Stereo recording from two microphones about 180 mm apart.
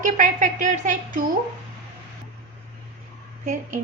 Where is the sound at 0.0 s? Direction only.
45° right (ahead or behind).